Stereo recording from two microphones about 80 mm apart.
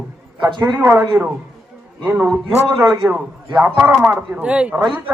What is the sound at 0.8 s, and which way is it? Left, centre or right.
Speech, right.